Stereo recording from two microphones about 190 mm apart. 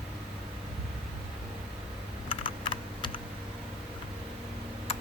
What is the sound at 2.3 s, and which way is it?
Computer keyboard, 25° left (ahead or behind).